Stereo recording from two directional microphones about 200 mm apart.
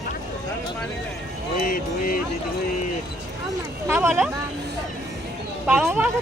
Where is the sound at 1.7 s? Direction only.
45° left (ahead or behind).